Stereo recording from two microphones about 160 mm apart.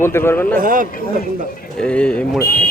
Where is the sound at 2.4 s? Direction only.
65° left (ahead or behind).